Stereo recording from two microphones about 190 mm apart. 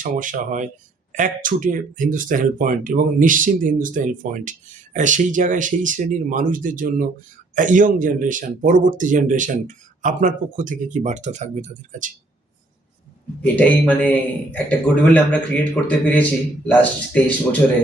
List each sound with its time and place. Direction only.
0.0 s speech: 45° right (ahead or behind)
13.4 s a man's voice: 5° left (ahead or behind)